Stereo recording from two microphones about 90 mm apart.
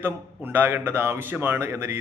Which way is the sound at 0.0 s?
20° right (ahead or behind).